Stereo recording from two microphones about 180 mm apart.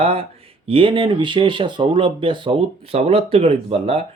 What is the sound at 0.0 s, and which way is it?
Speech, 35° right (ahead or behind).